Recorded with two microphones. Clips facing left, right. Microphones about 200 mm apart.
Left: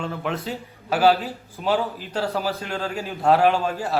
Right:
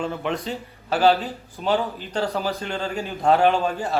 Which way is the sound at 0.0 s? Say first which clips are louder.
Right 1 dB; centre (ahead or behind).